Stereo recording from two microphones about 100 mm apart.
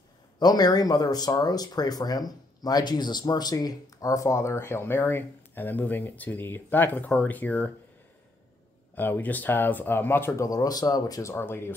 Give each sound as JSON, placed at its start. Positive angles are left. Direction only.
{"t": 0.4, "sound": "speech", "side_deg": 40}
{"t": 8.9, "sound": "speech", "side_deg": 20}
{"t": 10.4, "sound": "speech", "side_deg": 40}
{"t": 11.3, "sound": "speech", "side_deg": 25}